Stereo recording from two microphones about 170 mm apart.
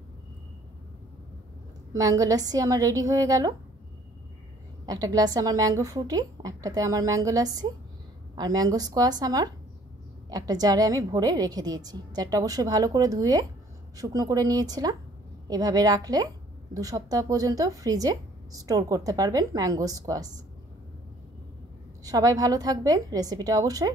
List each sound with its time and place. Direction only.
2.0 s a woman's voice: 20° right (ahead or behind)
4.8 s a woman's voice: 20° right (ahead or behind)
22.0 s a woman's voice: 20° right (ahead or behind)